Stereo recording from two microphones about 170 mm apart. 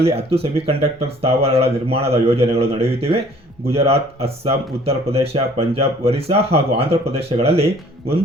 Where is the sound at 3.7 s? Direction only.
35° right (ahead or behind).